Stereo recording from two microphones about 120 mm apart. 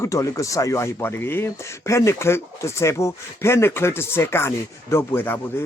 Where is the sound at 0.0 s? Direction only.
25° left (ahead or behind).